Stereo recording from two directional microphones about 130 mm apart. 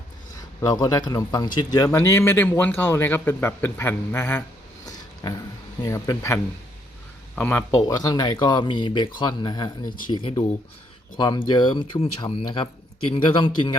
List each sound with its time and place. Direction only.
0.6 s speech: 30° left (ahead or behind)
4.9 s a sound: 25° left (ahead or behind)
5.8 s speech: 25° left (ahead or behind)
7.8 s speech: 30° left (ahead or behind)